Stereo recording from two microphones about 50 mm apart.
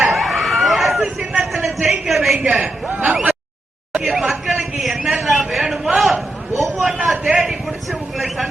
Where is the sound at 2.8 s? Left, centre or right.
Right.